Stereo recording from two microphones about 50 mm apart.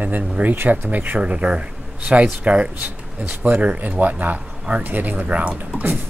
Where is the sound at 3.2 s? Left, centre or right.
Right.